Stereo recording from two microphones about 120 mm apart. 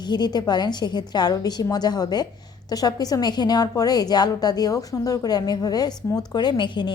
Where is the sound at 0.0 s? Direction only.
35° left (ahead or behind).